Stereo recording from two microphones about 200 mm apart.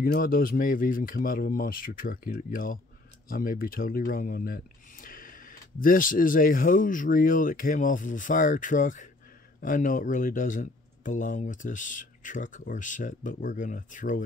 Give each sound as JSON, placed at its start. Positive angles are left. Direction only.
{"t": 0.0, "sound": "speech", "side_deg": 45}